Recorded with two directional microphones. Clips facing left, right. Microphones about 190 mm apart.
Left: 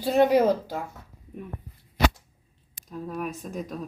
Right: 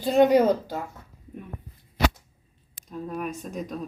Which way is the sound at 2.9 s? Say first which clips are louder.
Right 1 dB; centre (ahead or behind).